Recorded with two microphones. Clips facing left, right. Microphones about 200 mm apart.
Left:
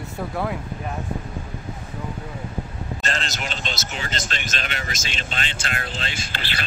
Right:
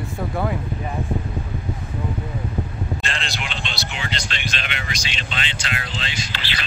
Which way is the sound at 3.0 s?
40° left (ahead or behind).